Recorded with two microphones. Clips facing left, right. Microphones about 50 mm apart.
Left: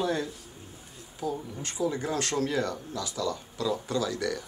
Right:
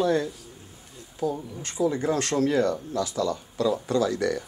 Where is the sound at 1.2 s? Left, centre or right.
Right.